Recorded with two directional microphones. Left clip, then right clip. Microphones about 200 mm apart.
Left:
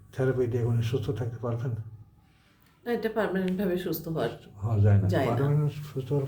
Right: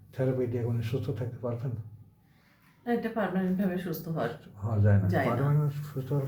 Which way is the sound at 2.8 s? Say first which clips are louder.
Left 2 dB; 65° left (ahead or behind).